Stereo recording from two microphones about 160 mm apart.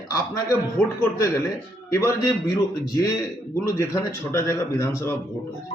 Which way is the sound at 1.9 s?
15° left (ahead or behind).